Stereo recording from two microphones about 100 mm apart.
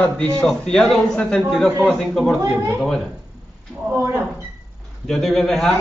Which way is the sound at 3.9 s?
20° right (ahead or behind).